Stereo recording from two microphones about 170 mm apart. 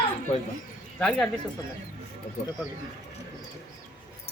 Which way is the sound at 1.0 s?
5° left (ahead or behind).